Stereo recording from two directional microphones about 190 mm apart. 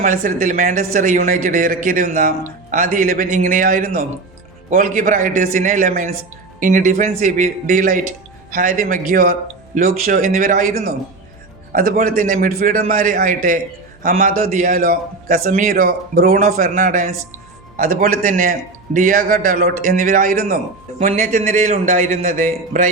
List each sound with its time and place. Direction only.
0.0 s a man's voice: 45° right (ahead or behind)
21.0 s a man's voice: 40° right (ahead or behind)